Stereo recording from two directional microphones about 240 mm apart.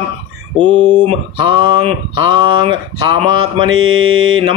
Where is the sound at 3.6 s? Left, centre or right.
Right.